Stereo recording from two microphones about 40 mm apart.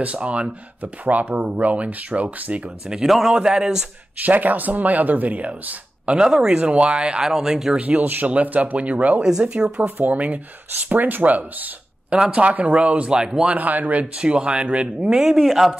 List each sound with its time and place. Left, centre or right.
0.0 s speech: right
3.1 s speech: centre
3.3 s speech: centre
4.2 s speech: right
6.1 s speech: centre
6.5 s speech: right
7.2 s speech: centre
7.8 s speech: right
9.4 s speech: right
10.0 s speech: right
12.1 s speech: right
13.6 s speech: right
14.2 s speech: right
15.0 s speech: centre